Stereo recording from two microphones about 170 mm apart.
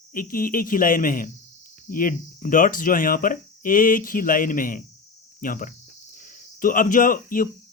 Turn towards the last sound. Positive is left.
turn(degrees=55)  # may be behind; listen again after turning